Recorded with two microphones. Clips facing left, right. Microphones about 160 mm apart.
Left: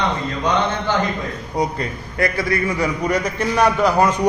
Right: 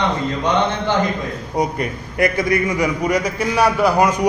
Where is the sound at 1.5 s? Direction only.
20° right (ahead or behind).